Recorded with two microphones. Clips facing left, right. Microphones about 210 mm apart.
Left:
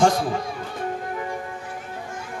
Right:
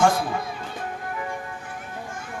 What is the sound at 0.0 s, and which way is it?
Music, 40° left (ahead or behind).